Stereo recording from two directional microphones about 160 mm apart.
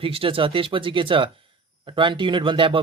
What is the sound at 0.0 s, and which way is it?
Speech, 35° right (ahead or behind).